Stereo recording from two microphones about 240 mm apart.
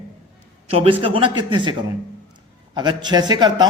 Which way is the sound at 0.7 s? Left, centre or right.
Right.